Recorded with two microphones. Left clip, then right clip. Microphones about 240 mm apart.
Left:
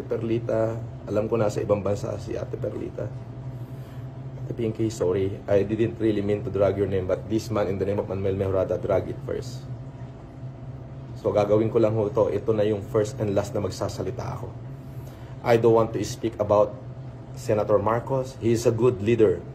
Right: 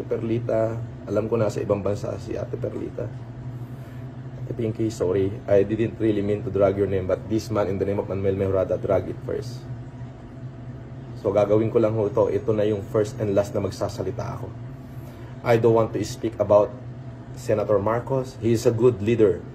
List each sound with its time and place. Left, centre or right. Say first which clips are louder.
0.1 s speech: right 1 dB; centre
4.6 s speech: right 1 dB; centre
11.2 s speech: right 1 dB; centre
15.4 s speech: even; centre